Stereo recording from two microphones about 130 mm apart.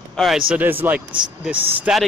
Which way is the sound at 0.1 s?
Centre (ahead or behind).